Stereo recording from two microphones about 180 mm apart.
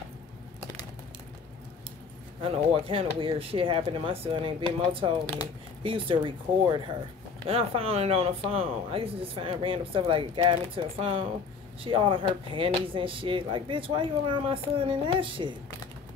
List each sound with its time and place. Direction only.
2.4 s speech: 30° right (ahead or behind)